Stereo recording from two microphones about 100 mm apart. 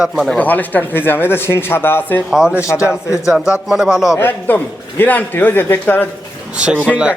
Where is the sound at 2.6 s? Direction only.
30° left (ahead or behind).